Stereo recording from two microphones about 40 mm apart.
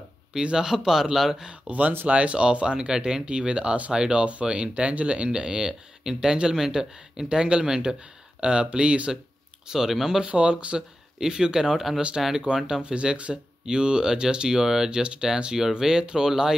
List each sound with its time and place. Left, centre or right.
0.3 s speech: centre
1.5 s speech: right
9.7 s speech: centre
10.2 s speech: right
11.1 s speech: centre
11.7 s speech: centre
12.5 s speech: right